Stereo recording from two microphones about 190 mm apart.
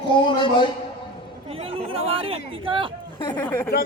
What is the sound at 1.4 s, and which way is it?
Chatter, 30° right (ahead or behind).